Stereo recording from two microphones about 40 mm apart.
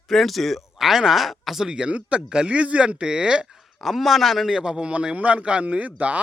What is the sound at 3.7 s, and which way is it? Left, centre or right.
A man's voice, centre.